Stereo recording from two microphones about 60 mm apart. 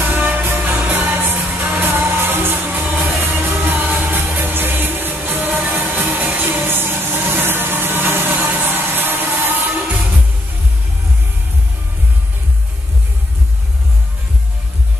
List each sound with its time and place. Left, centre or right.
0.0 s music: right